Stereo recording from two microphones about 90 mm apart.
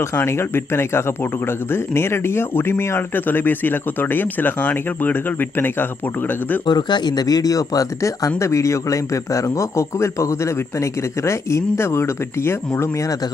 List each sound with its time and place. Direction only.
0.0 s speech: 30° left (ahead or behind)
6.7 s a man's voice: 55° left (ahead or behind); by 13.1 s 30° left (ahead or behind)